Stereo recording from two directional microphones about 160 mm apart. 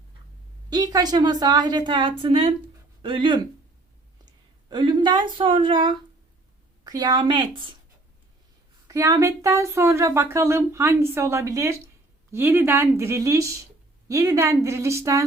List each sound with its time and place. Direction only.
0.7 s a woman's voice: 25° right (ahead or behind)
8.9 s speech: 20° right (ahead or behind)